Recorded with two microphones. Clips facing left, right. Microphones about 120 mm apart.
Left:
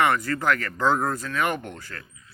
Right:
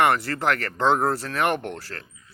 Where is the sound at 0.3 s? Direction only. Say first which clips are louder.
Left 2 dB; 40° right (ahead or behind).